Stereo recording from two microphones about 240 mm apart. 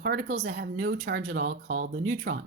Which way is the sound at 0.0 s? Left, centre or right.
Right.